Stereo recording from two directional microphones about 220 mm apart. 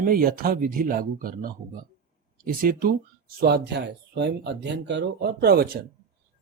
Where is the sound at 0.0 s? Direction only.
40° right (ahead or behind).